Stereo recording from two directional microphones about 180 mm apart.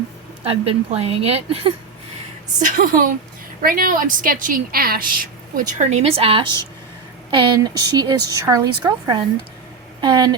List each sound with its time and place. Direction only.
0.4 s a woman's voice: 35° right (ahead or behind)
2.6 s a woman's voice: 50° right (ahead or behind); by 10.3 s 25° right (ahead or behind)